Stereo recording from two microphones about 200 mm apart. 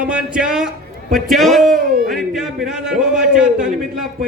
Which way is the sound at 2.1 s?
Centre (ahead or behind).